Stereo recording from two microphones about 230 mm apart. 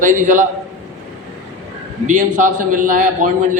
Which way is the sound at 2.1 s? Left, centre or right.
Right.